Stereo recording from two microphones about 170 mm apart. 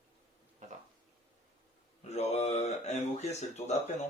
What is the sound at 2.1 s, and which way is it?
Speech, 40° left (ahead or behind).